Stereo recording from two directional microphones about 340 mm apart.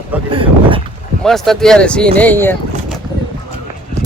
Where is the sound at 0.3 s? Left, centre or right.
Centre.